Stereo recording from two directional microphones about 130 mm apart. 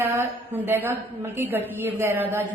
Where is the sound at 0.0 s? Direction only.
15° right (ahead or behind).